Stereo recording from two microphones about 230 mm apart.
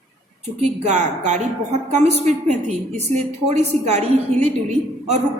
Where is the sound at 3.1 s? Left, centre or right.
Right.